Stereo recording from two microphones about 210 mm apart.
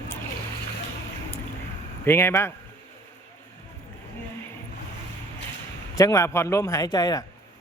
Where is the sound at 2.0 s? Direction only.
10° left (ahead or behind).